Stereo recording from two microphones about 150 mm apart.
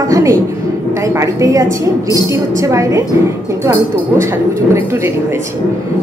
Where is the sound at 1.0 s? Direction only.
20° right (ahead or behind).